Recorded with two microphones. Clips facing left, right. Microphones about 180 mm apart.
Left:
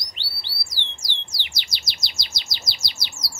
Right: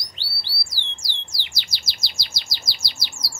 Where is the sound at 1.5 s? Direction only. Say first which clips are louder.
Even; 20° left (ahead or behind).